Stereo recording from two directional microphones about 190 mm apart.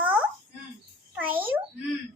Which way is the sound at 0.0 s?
10° right (ahead or behind).